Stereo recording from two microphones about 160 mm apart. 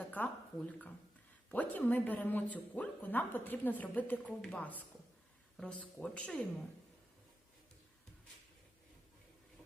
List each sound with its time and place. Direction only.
0.1 s speech: 10° left (ahead or behind)